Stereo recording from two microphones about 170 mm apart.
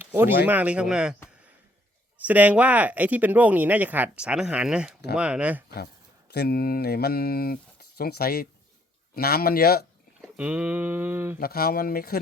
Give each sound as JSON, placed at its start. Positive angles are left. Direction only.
{"t": 0.0, "sound": "a sound", "side_deg": -10}
{"t": 0.4, "sound": "speech", "side_deg": -10}
{"t": 2.2, "sound": "speech", "side_deg": -10}
{"t": 5.7, "sound": "speech", "side_deg": 70}
{"t": 10.2, "sound": "speech", "side_deg": -10}
{"t": 11.3, "sound": "speech", "side_deg": 60}